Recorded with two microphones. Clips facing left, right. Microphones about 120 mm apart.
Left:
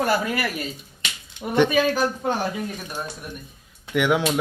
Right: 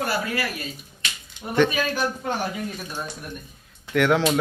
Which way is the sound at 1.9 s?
40° left (ahead or behind).